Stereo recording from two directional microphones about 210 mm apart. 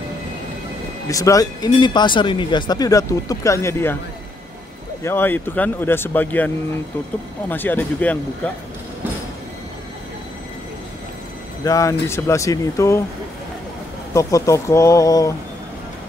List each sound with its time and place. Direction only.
1.0 s speech: 15° left (ahead or behind)
5.0 s speech: 10° left (ahead or behind)
11.6 s speech: 15° left (ahead or behind)
14.1 s speech: 15° left (ahead or behind)